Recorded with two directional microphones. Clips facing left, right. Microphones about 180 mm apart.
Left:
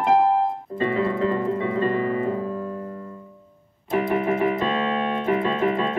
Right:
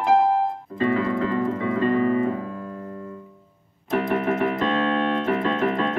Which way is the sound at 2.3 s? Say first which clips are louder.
Left 3 dB; 35° left (ahead or behind).